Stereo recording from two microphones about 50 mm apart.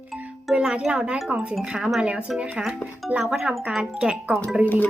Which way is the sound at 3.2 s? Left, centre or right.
Centre.